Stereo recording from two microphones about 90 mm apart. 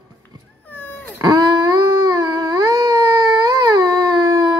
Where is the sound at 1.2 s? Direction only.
50° right (ahead or behind).